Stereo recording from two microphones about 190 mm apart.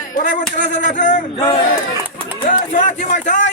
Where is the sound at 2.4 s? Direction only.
40° left (ahead or behind).